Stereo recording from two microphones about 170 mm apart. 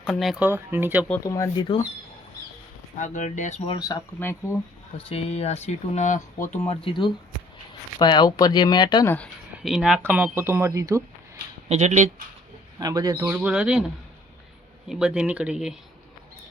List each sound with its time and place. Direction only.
0.0 s speech: centre (ahead or behind)
0.4 s speech: 15° right (ahead or behind)
1.2 s speech: 20° left (ahead or behind)
3.0 s speech: 45° left (ahead or behind)
3.7 s speech: 25° left (ahead or behind)
4.2 s speech: 15° left (ahead or behind)
5.0 s speech: 35° left (ahead or behind)
6.7 s speech: 30° left (ahead or behind)
9.0 s speech: 5° left (ahead or behind); by 11.0 s 15° right (ahead or behind)
11.7 s speech: 45° right (ahead or behind)
12.8 s speech: 20° right (ahead or behind); by 13.8 s 5° right (ahead or behind)
14.8 s speech: 5° right (ahead or behind)